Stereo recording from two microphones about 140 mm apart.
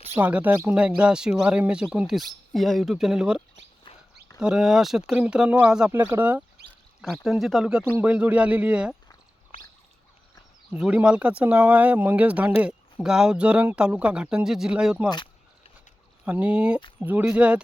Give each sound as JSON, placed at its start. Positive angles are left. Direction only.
{"t": 0.0, "sound": "speech", "side_deg": -15}
{"t": 3.9, "sound": "a sound", "side_deg": 35}
{"t": 4.4, "sound": "speech", "side_deg": -5}
{"t": 7.3, "sound": "speech", "side_deg": 0}
{"t": 10.7, "sound": "speech", "side_deg": -10}
{"t": 16.2, "sound": "speech", "side_deg": -10}